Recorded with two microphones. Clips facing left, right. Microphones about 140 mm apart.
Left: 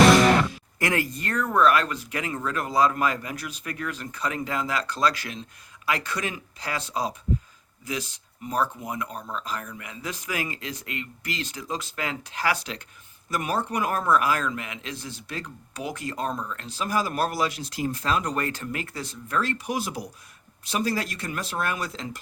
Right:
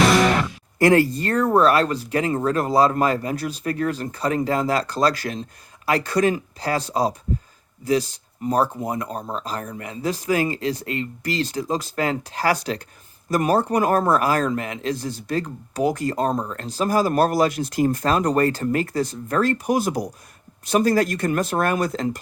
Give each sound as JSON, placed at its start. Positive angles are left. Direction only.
{"t": 0.8, "sound": "a man's voice", "side_deg": -35}